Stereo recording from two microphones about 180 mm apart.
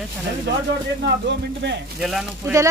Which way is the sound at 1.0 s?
70° right (ahead or behind).